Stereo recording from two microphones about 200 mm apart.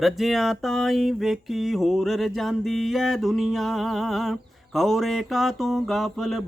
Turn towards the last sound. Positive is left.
turn(degrees=0)  # may be behind; listen again after turning